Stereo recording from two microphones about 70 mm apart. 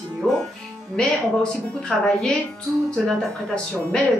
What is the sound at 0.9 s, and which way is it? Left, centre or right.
Speech, centre.